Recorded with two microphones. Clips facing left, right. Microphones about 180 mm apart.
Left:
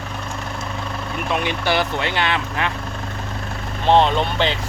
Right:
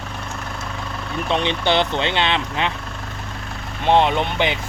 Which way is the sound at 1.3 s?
25° right (ahead or behind).